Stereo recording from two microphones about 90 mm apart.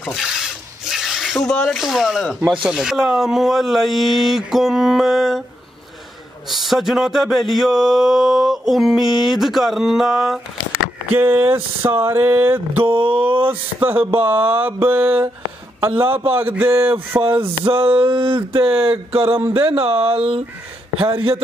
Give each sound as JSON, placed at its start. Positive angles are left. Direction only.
{"t": 0.0, "sound": "speech", "side_deg": 0}
{"t": 6.5, "sound": "speech", "side_deg": 0}
{"t": 11.1, "sound": "mantra", "side_deg": -25}
{"t": 12.8, "sound": "a sound", "side_deg": -75}
{"t": 13.5, "sound": "mantra", "side_deg": -25}
{"t": 17.4, "sound": "a sound", "side_deg": -90}
{"t": 19.7, "sound": "speech", "side_deg": -90}